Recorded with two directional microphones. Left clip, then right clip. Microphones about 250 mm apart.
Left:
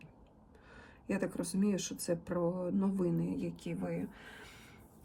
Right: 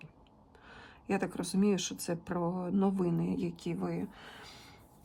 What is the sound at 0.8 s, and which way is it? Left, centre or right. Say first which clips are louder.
A woman's voice: right 3 dB; centre.